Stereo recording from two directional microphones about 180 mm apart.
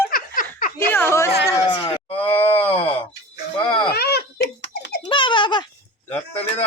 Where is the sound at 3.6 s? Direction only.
30° left (ahead or behind).